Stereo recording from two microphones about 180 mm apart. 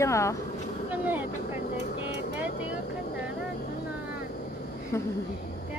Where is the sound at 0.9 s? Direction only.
10° right (ahead or behind).